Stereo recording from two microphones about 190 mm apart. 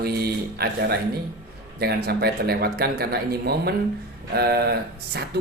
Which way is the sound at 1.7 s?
55° right (ahead or behind).